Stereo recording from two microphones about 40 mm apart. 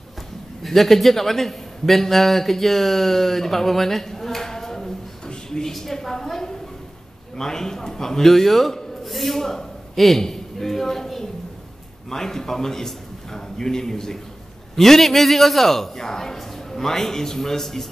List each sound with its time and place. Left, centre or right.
0.6 s a man's voice: centre
5.3 s a sound: centre
7.3 s a man's voice: centre